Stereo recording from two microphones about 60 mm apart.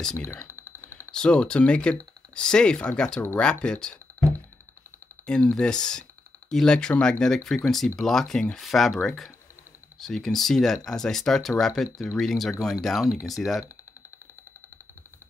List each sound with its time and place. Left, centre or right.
0.2 s a sound: left
1.1 s speech: centre
5.2 s speech: centre